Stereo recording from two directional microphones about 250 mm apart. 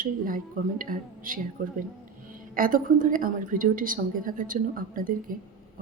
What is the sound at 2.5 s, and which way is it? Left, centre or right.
A woman's voice, right.